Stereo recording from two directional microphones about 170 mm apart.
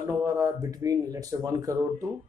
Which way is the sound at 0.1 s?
20° right (ahead or behind).